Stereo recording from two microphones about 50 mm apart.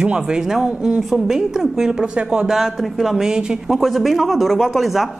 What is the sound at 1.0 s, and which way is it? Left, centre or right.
A woman's voice, centre.